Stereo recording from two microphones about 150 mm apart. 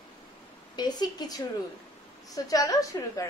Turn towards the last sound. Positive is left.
turn(degrees=20)  # may be behind; listen again after turning